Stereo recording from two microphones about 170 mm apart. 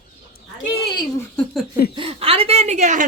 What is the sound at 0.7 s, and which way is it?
Speech, 25° left (ahead or behind).